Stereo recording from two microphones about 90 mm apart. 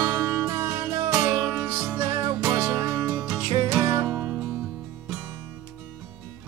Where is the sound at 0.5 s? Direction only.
25° right (ahead or behind).